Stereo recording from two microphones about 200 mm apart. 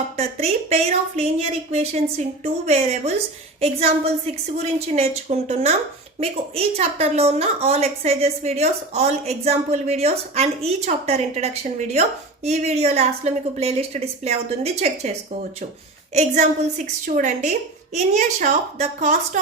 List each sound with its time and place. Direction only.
0.2 s a woman's voice: 30° right (ahead or behind)